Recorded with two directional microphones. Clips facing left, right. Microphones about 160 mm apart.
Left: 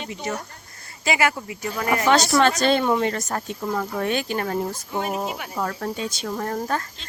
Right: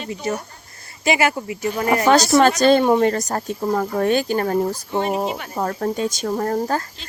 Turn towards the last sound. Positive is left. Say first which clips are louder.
# right 5 dB
turn(degrees=-35)  # may be behind; listen again after turning